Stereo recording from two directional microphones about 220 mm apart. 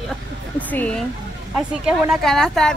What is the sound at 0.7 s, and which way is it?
Speech, 5° left (ahead or behind).